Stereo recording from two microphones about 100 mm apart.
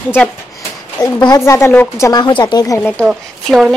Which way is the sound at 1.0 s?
45° left (ahead or behind).